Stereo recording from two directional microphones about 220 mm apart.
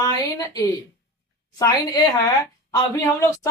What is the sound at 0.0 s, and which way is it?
Speech, 15° left (ahead or behind).